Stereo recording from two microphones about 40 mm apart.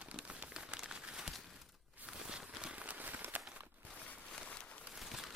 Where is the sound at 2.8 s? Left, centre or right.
Right.